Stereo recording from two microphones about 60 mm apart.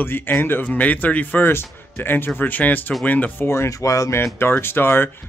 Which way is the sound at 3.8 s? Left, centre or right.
Left.